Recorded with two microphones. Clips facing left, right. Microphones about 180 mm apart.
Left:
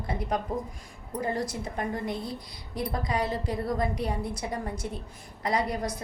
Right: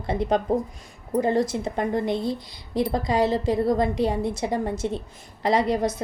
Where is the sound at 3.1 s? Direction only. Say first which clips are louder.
Right 8 dB; 90° right.